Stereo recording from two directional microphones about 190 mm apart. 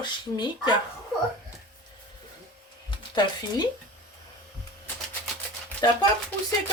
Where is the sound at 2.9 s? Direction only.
20° left (ahead or behind).